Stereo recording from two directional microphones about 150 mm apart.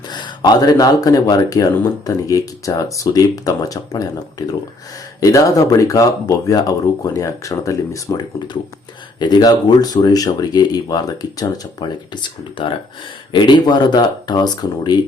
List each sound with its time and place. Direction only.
0.1 s speech: 30° left (ahead or behind)